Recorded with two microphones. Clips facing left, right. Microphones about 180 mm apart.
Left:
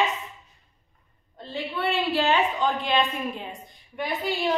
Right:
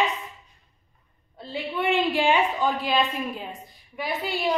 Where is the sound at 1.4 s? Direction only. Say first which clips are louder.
Right 1 dB; 10° right (ahead or behind).